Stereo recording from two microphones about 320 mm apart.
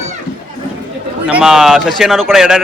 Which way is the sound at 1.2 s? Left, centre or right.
Centre.